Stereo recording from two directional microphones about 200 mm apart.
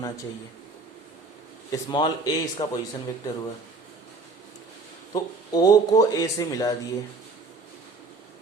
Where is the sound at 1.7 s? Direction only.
20° left (ahead or behind).